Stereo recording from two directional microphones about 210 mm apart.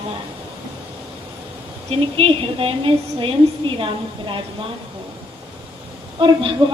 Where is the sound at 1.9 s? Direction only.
30° right (ahead or behind).